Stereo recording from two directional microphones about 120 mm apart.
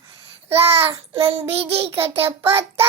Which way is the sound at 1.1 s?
50° right (ahead or behind).